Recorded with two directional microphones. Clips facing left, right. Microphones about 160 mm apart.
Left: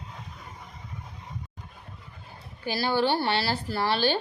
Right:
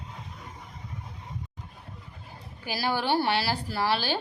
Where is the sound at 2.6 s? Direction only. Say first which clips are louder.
Left 3 dB; 10° right (ahead or behind).